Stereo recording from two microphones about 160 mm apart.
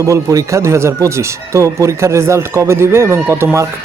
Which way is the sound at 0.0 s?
20° right (ahead or behind).